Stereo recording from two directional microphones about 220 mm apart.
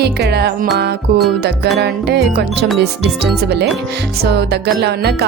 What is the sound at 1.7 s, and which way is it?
Speech, 50° right (ahead or behind).